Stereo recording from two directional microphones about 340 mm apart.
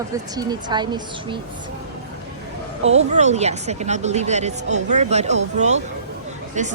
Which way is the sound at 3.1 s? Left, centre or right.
Centre.